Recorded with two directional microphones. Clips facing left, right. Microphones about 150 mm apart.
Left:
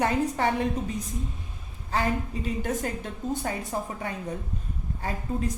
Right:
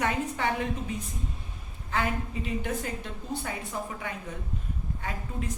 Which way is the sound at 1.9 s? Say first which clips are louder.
Left 3 dB; 35° left (ahead or behind).